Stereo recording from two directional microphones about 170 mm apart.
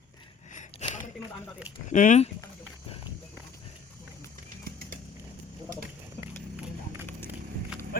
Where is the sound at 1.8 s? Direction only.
45° left (ahead or behind).